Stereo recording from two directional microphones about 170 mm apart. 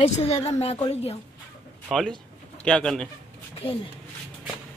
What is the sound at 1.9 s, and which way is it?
Speech, 5° left (ahead or behind).